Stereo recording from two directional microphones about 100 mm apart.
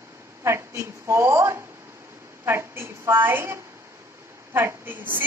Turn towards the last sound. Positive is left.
turn(degrees=-20)  # may be behind; listen again after turning